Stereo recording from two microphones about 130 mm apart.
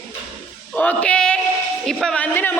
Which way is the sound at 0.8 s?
10° left (ahead or behind).